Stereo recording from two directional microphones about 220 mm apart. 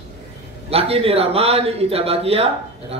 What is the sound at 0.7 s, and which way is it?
A man's voice, 25° right (ahead or behind).